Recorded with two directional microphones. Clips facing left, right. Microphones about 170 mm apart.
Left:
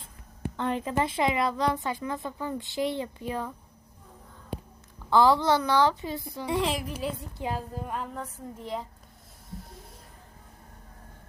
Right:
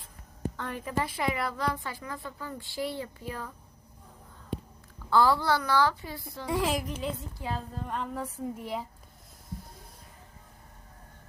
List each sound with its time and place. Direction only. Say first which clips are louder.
0.5 s a woman's voice: left 6 dB; 25° left (ahead or behind)
5.1 s a woman's voice: left 3 dB; 20° left (ahead or behind)
6.5 s a woman's voice: left 1 dB; centre (ahead or behind)
8.2 s a woman's voice: right 3 dB; 10° right (ahead or behind)